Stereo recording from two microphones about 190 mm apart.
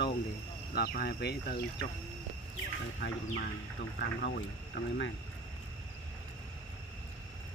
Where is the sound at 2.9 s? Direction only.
50° left (ahead or behind).